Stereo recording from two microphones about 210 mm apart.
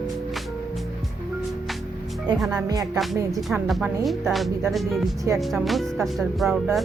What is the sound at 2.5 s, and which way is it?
Speech, 15° right (ahead or behind).